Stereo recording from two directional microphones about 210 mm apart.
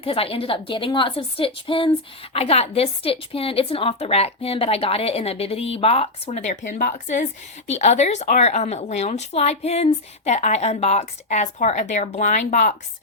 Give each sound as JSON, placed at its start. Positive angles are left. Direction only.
{"t": 0.0, "sound": "a woman's voice", "side_deg": 25}